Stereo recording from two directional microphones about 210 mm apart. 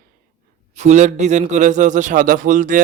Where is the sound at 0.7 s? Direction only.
35° right (ahead or behind).